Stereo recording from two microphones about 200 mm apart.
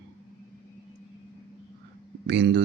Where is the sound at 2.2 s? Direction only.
60° right (ahead or behind).